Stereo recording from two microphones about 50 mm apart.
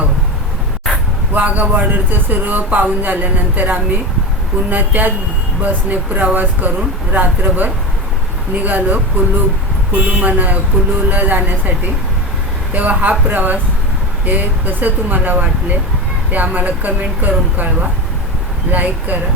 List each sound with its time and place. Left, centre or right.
1.3 s speech: right
12.7 s speech: right